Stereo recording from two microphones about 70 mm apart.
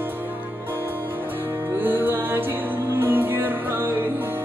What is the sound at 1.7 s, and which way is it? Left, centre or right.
Music, right.